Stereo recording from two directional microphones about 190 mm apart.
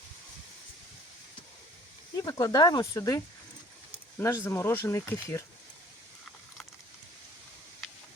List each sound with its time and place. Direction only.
2.1 s speech: 20° left (ahead or behind)
4.2 s speech: 15° left (ahead or behind)